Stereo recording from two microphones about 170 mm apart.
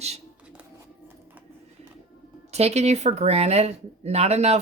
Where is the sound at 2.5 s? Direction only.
40° right (ahead or behind).